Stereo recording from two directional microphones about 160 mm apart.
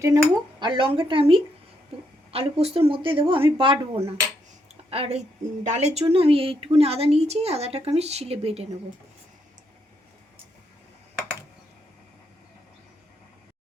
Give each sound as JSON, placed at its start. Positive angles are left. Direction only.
{"t": 0.0, "sound": "a woman's voice", "side_deg": -20}